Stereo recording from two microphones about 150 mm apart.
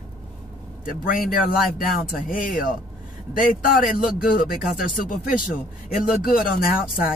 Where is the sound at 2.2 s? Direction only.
65° left (ahead or behind).